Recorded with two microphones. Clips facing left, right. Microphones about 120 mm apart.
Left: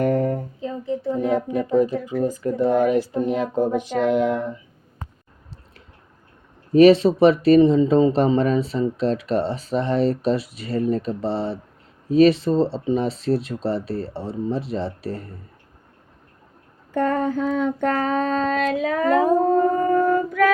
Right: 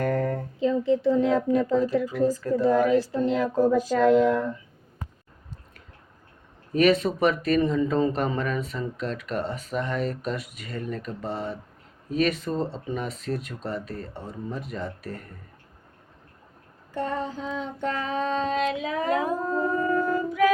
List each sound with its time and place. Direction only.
0.0 s a sound: 20° left (ahead or behind)
0.6 s a woman's voice: 90° right
1.6 s speech: 15° left (ahead or behind)
6.7 s speech: 30° left (ahead or behind)
16.9 s child singing: 55° left (ahead or behind)